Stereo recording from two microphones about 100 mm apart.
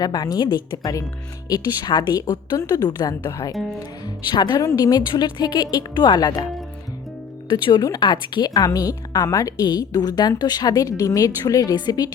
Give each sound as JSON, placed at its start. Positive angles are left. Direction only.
{"t": 0.0, "sound": "a woman's voice", "side_deg": 40}
{"t": 3.5, "sound": "speech", "side_deg": 0}
{"t": 4.0, "sound": "a woman's voice", "side_deg": 45}
{"t": 4.6, "sound": "a woman's voice", "side_deg": 35}
{"t": 7.5, "sound": "a woman's voice", "side_deg": 40}